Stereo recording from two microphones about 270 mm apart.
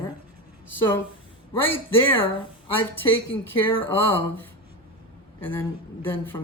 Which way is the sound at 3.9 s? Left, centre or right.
Centre.